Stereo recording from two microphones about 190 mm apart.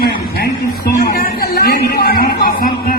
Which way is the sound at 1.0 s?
55° left (ahead or behind).